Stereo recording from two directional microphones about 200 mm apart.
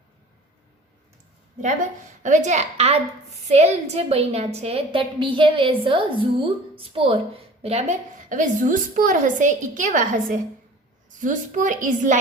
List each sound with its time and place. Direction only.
2.2 s a woman's voice: 35° right (ahead or behind)